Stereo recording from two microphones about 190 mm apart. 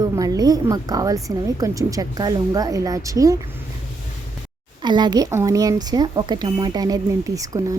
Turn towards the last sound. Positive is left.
turn(degrees=-20)  # may be behind; listen again after turning